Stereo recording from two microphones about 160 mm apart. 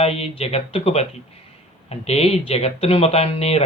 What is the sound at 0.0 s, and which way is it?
Speech, 40° left (ahead or behind).